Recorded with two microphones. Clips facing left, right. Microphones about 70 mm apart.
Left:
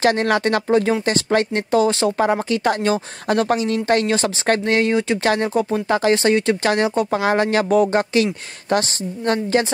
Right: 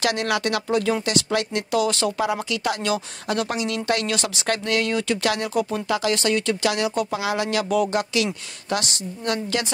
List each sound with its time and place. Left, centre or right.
0.0 s speech: left